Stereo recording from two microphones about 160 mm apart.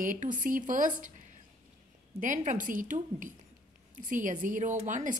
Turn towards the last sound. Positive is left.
turn(degrees=-50)  # may be behind; listen again after turning